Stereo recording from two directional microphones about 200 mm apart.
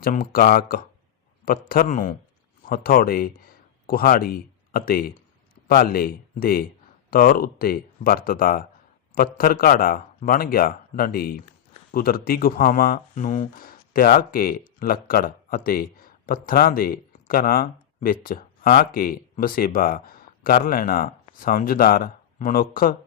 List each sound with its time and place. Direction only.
0.0 s speech: 45° left (ahead or behind)